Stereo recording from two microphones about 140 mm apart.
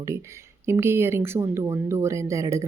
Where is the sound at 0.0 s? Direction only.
20° right (ahead or behind).